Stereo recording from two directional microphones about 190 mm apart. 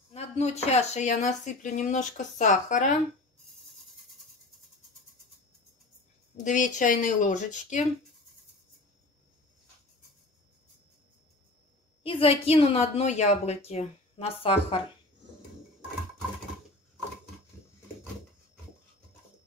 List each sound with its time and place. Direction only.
0.1 s a woman's voice: 35° left (ahead or behind)
6.3 s a woman's voice: 40° left (ahead or behind)
12.0 s a woman's voice: 30° left (ahead or behind)